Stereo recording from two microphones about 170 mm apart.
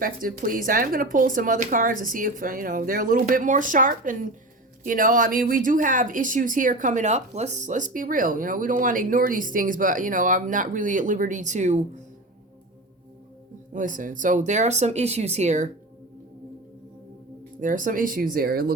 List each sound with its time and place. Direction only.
0.0 s speech: 55° right (ahead or behind)
13.7 s speech: 50° right (ahead or behind)
17.6 s speech: 50° right (ahead or behind)